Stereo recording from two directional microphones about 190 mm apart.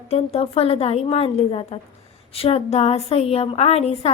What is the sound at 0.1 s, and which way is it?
A woman's voice, 30° left (ahead or behind).